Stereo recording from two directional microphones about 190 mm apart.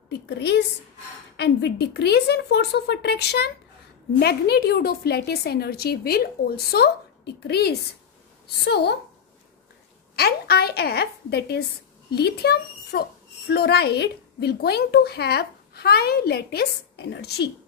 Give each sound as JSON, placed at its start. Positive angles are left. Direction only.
{"t": 0.1, "sound": "a woman's voice", "side_deg": 60}
{"t": 10.1, "sound": "a woman's voice", "side_deg": 55}